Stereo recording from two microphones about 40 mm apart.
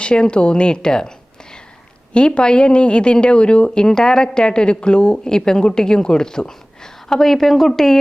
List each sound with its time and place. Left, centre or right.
0.0 s speech: left
2.1 s a woman's voice: left; by 7.9 s centre